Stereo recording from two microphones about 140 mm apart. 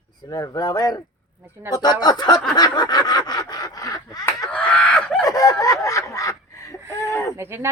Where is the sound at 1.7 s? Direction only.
30° left (ahead or behind).